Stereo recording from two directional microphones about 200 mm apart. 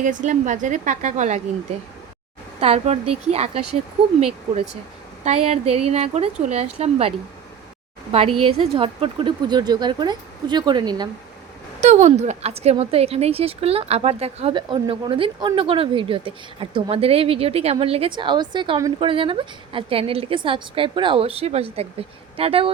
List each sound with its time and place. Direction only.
0.0 s speech: 40° right (ahead or behind)
2.6 s speech: 30° right (ahead or behind)
5.2 s speech: 35° right (ahead or behind)
8.1 s a woman's voice: 30° right (ahead or behind)
11.8 s a woman's voice: 35° right (ahead or behind)